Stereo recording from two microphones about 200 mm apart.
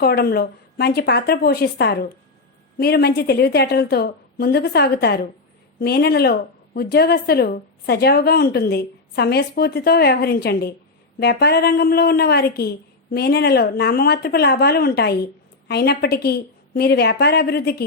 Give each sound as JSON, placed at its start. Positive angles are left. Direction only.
{"t": 0.0, "sound": "a woman's voice", "side_deg": 50}